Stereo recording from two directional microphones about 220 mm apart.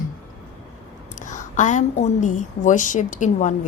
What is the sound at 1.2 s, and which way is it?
A woman's voice, 35° left (ahead or behind).